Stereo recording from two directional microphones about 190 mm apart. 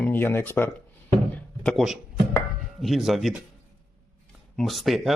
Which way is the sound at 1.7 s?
Centre (ahead or behind).